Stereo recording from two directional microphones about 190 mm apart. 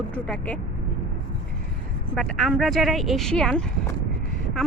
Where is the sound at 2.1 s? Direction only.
Centre (ahead or behind).